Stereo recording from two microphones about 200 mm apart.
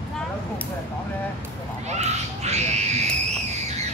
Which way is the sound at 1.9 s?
35° right (ahead or behind).